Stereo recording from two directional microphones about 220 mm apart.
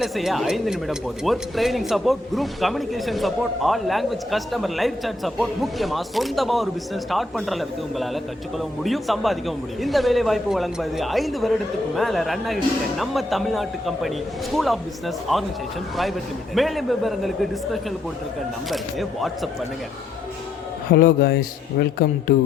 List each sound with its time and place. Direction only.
0.0 s speech: centre (ahead or behind)
16.6 s speech: centre (ahead or behind)
20.9 s a man's voice: 45° left (ahead or behind)